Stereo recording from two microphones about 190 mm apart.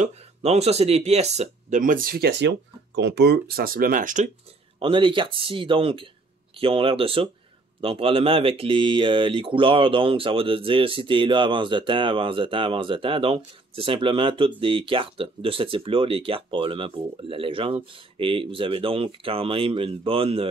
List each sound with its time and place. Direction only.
0.4 s speech: 35° right (ahead or behind)
4.7 s speech: 25° right (ahead or behind)